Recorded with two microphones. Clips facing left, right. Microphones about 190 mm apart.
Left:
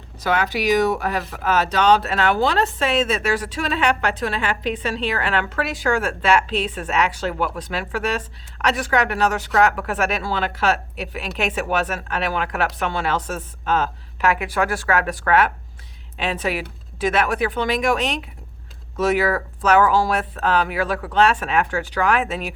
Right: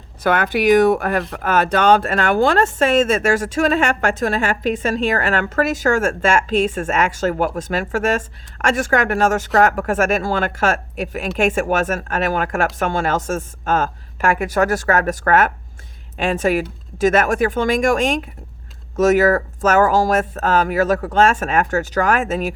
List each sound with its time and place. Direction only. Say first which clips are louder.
0.2 s speech: right 4 dB; 55° right (ahead or behind)